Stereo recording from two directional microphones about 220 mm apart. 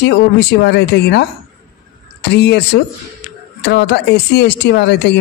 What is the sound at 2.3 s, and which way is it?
Speech, 50° left (ahead or behind).